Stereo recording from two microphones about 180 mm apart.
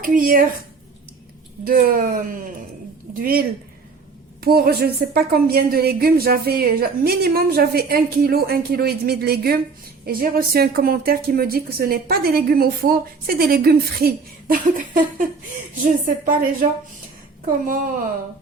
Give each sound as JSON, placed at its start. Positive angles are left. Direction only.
{"t": 0.0, "sound": "a woman's voice", "side_deg": -50}
{"t": 1.6, "sound": "a woman's voice", "side_deg": -50}
{"t": 4.4, "sound": "a woman's voice", "side_deg": -60}